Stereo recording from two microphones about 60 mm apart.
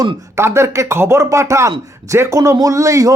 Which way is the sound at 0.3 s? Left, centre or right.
Right.